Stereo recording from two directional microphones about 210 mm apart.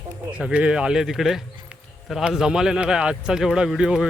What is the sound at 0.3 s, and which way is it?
Speech, 5° right (ahead or behind).